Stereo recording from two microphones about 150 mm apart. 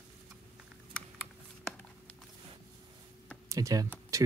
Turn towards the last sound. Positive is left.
turn(degrees=-20)  # may be behind; listen again after turning